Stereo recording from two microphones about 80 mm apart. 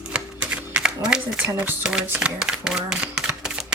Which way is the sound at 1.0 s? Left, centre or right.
Centre.